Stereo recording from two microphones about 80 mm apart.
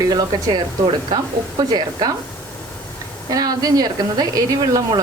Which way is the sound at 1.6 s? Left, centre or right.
Right.